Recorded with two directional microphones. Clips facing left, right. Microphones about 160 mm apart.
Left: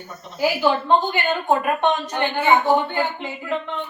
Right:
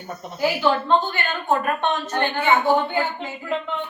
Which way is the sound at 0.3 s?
10° left (ahead or behind).